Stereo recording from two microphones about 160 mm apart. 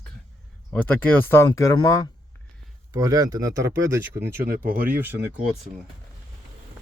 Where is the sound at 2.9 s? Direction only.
20° right (ahead or behind).